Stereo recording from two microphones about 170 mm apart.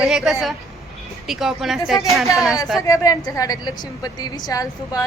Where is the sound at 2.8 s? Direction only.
20° left (ahead or behind).